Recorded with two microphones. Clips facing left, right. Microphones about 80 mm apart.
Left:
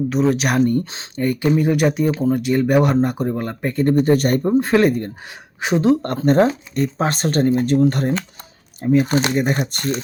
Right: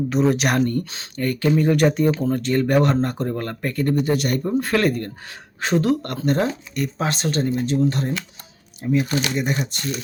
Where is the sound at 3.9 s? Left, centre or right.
Left.